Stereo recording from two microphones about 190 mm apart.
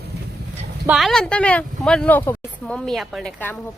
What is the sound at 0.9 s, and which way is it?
Speech, centre (ahead or behind).